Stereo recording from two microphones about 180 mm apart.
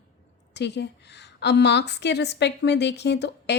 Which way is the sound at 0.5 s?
70° left (ahead or behind).